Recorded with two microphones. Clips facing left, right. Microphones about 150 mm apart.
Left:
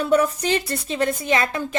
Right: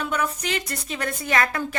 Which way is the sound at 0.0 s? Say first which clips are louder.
Left 8 dB; 35° left (ahead or behind).